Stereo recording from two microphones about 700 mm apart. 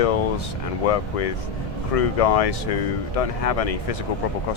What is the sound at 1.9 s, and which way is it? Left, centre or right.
Speech, left.